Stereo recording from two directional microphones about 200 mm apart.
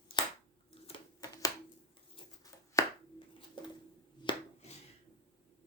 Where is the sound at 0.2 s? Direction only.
20° left (ahead or behind).